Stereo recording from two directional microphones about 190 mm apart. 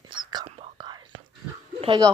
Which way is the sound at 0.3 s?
20° right (ahead or behind).